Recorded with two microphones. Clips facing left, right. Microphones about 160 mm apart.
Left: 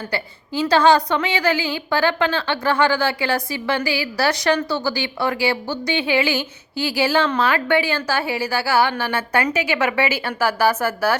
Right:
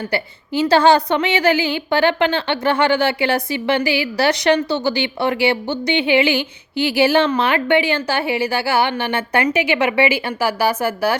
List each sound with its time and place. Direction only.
0.1 s a woman's voice: 25° right (ahead or behind)